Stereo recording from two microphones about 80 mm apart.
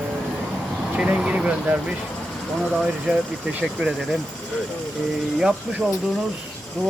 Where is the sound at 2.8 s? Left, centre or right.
Centre.